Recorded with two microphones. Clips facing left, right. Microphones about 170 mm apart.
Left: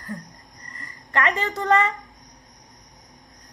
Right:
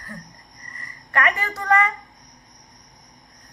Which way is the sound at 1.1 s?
25° left (ahead or behind).